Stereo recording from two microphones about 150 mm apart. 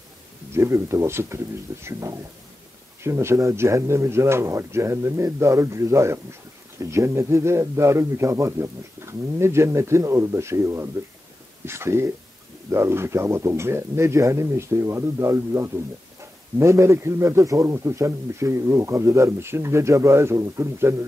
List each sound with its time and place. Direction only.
0.5 s a man's voice: 20° right (ahead or behind)